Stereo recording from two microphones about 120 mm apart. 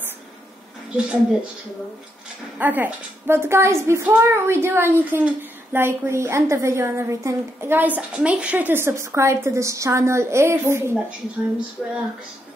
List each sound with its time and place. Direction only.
0.9 s a woman's voice: 10° right (ahead or behind)
2.6 s a woman's voice: 15° right (ahead or behind)